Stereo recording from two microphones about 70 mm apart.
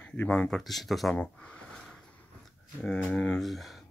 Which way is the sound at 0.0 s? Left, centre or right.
Centre.